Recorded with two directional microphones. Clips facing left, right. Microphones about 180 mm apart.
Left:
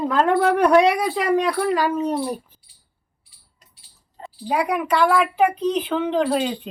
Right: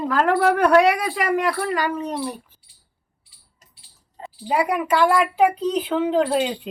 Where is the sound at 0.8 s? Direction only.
Centre (ahead or behind).